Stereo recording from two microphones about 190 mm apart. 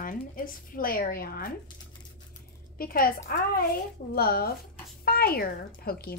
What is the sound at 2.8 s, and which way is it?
Speech, 50° left (ahead or behind).